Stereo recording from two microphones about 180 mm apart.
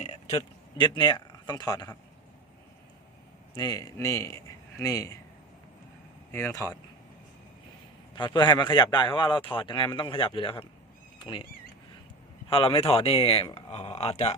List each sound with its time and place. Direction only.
0.0 s speech: 35° left (ahead or behind)
3.5 s a man's voice: 20° left (ahead or behind)
6.3 s speech: 15° left (ahead or behind)
8.1 s a man's voice: 25° left (ahead or behind)
12.5 s speech: 30° left (ahead or behind)